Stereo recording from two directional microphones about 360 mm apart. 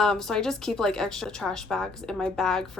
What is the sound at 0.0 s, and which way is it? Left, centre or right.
A woman's voice, centre.